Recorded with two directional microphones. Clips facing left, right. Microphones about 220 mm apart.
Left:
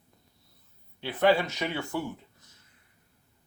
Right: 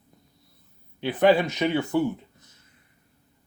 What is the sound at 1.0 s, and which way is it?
Speech, 15° right (ahead or behind).